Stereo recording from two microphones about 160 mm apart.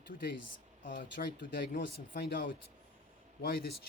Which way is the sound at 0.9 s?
60° left (ahead or behind).